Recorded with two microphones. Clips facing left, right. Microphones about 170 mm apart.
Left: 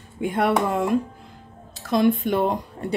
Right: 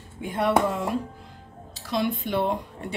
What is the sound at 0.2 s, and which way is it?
Speech, 55° left (ahead or behind).